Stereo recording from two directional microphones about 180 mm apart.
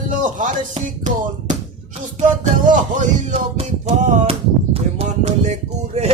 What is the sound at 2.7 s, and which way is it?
Music, 45° right (ahead or behind).